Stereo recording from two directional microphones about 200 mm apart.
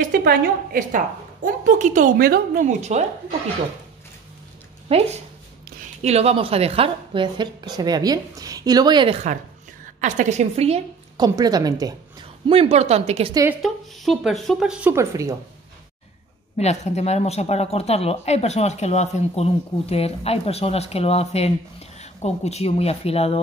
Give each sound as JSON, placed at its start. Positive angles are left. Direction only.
{"t": 0.0, "sound": "a woman's voice", "side_deg": -50}
{"t": 4.8, "sound": "a woman's voice", "side_deg": -30}
{"t": 11.2, "sound": "a woman's voice", "side_deg": -20}
{"t": 12.4, "sound": "speech", "side_deg": -30}
{"t": 13.3, "sound": "a woman's voice", "side_deg": -15}
{"t": 13.6, "sound": "speech", "side_deg": 0}
{"t": 16.5, "sound": "speech", "side_deg": 35}